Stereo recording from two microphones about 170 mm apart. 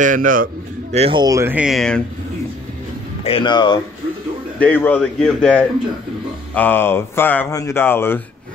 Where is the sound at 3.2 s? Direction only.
30° left (ahead or behind).